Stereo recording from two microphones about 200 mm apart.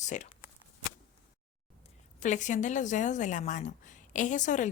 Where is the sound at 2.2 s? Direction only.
35° left (ahead or behind).